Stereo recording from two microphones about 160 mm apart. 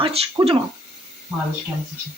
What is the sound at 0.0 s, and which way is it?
Speech, 35° right (ahead or behind).